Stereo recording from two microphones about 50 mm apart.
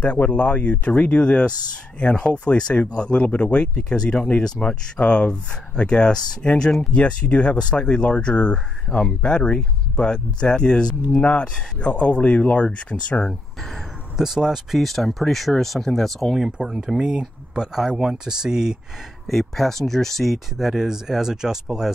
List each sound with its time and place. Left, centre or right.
0.0 s speech: left
14.1 s speech: centre
14.8 s speech: centre
16.4 s speech: centre
19.2 s speech: centre
20.5 s speech: centre